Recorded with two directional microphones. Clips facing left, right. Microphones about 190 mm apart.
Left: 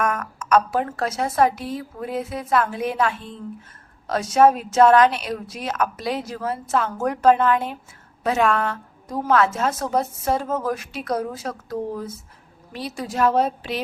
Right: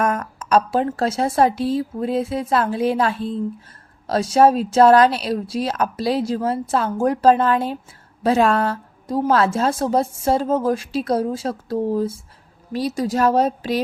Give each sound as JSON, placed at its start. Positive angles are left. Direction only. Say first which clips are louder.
{"t": 0.0, "sound": "a woman's voice", "louder": "right 3 dB", "side_deg": -30}